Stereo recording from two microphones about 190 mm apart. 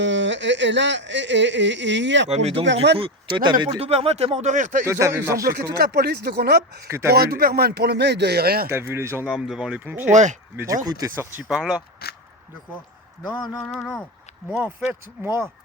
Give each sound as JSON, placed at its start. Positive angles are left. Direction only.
{"t": 0.0, "sound": "speech", "side_deg": -70}
{"t": 2.3, "sound": "speech", "side_deg": -35}
{"t": 4.9, "sound": "speech", "side_deg": -15}
{"t": 5.5, "sound": "speech", "side_deg": -50}
{"t": 6.8, "sound": "speech", "side_deg": -15}
{"t": 7.1, "sound": "speech", "side_deg": -55}
{"t": 8.7, "sound": "speech", "side_deg": -15}
{"t": 10.1, "sound": "speech", "side_deg": -40}
{"t": 10.8, "sound": "speech", "side_deg": -15}
{"t": 12.0, "sound": "speech", "side_deg": 55}
{"t": 13.2, "sound": "speech", "side_deg": 25}
{"t": 13.7, "sound": "speech", "side_deg": 0}
{"t": 15.2, "sound": "speech", "side_deg": -10}